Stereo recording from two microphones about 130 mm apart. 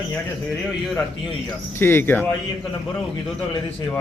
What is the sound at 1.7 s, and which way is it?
Speech, 15° left (ahead or behind).